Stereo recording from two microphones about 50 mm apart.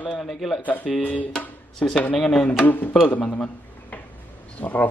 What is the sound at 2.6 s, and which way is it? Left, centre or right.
Speech, left.